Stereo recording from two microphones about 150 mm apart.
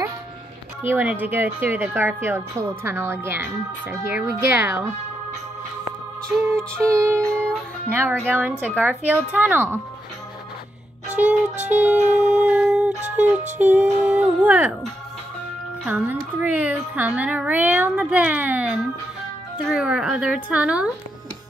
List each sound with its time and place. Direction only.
0.8 s a woman's voice: 10° right (ahead or behind)
6.4 s a woman's voice: 20° right (ahead or behind)
11.2 s a woman's voice: 10° right (ahead or behind)
11.7 s music: 10° right (ahead or behind)
13.6 s a woman's voice: 10° right (ahead or behind)